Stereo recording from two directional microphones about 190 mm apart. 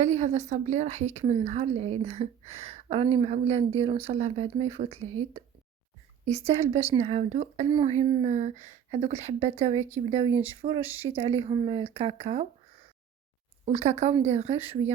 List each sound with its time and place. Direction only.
0.0 s a woman's voice: 35° right (ahead or behind)
13.7 s a woman's voice: 35° right (ahead or behind)